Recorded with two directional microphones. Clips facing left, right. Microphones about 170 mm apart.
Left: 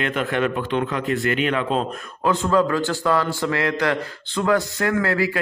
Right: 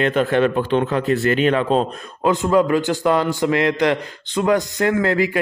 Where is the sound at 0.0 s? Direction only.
35° right (ahead or behind).